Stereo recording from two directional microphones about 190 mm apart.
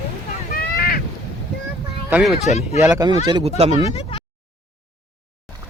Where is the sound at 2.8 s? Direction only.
20° right (ahead or behind).